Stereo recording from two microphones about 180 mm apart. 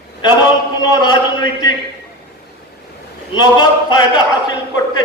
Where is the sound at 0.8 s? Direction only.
25° left (ahead or behind).